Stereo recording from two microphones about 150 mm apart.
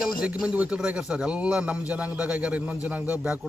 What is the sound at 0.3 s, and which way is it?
A man's voice, 5° right (ahead or behind).